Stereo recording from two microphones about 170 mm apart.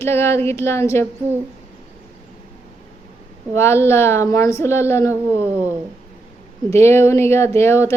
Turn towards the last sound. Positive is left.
turn(degrees=15)  # may be behind; listen again after turning